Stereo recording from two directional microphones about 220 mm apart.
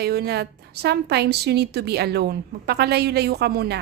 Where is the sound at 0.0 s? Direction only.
45° right (ahead or behind).